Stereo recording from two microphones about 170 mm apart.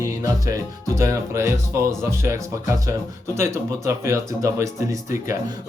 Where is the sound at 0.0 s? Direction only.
20° right (ahead or behind).